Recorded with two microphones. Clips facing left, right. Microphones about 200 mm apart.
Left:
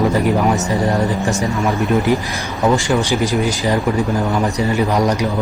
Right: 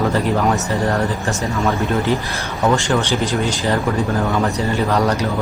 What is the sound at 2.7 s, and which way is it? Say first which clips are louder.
A man's voice: left 2 dB; 15° left (ahead or behind).